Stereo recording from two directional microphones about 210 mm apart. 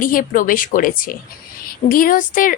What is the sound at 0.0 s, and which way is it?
A woman's voice, 40° left (ahead or behind).